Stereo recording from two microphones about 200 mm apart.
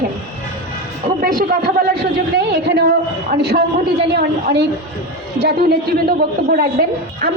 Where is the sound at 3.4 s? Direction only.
55° right (ahead or behind).